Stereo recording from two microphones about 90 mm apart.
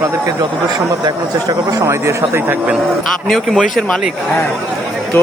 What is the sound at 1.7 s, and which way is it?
Speech, 35° right (ahead or behind).